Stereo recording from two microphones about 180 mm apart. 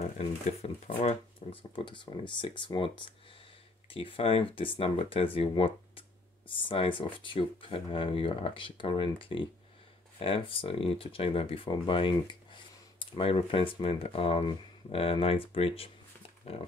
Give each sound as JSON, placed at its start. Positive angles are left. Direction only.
{"t": 0.0, "sound": "speech", "side_deg": 35}